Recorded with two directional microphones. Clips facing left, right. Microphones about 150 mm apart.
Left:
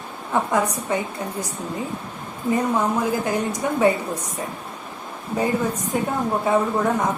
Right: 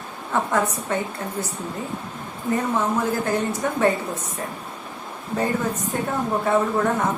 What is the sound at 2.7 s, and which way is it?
A woman's voice, 10° left (ahead or behind).